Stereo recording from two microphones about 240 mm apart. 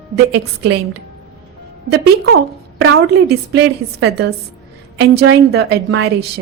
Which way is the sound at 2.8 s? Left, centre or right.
Right.